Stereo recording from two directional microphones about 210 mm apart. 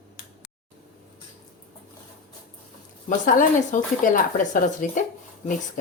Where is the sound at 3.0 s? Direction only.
35° left (ahead or behind).